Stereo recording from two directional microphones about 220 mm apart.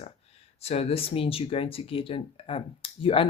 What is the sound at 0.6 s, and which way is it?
Speech, 25° left (ahead or behind).